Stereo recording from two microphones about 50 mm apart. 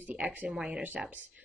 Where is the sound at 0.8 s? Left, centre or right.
Right.